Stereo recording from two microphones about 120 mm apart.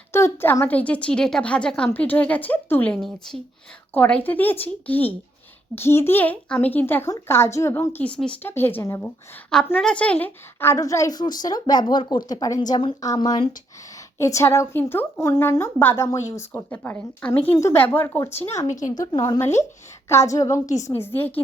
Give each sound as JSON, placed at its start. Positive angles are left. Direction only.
{"t": 0.1, "sound": "a woman's voice", "side_deg": 20}
{"t": 3.0, "sound": "a woman's voice", "side_deg": 0}
{"t": 3.9, "sound": "a woman's voice", "side_deg": 15}
{"t": 9.8, "sound": "a woman's voice", "side_deg": 10}
{"t": 18.9, "sound": "speech", "side_deg": 35}